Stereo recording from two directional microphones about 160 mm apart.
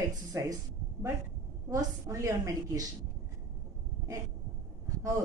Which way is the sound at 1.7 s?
20° right (ahead or behind).